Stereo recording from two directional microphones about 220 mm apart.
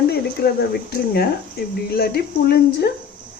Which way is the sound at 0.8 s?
45° left (ahead or behind).